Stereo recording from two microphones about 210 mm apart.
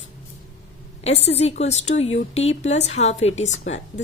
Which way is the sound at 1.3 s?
30° left (ahead or behind).